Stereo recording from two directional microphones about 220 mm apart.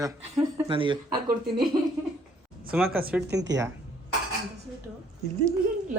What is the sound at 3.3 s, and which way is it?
Speech, 50° right (ahead or behind).